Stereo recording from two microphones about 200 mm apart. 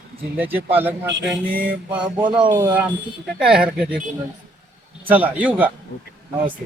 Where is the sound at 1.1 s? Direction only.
65° right (ahead or behind).